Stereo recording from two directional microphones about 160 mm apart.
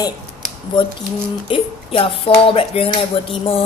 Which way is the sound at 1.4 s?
35° left (ahead or behind).